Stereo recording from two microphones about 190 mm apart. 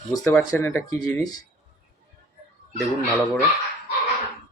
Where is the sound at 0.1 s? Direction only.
15° left (ahead or behind).